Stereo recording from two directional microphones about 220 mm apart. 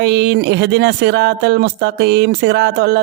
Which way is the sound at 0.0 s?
50° right (ahead or behind).